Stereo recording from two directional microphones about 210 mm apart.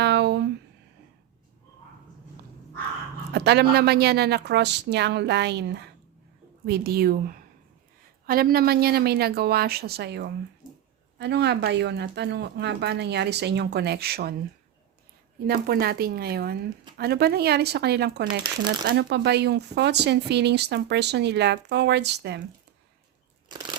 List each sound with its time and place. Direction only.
0.0 s a sound: 55° right (ahead or behind)
3.3 s speech: 50° right (ahead or behind)
15.4 s speech: 45° right (ahead or behind)
23.5 s crunch: 20° right (ahead or behind)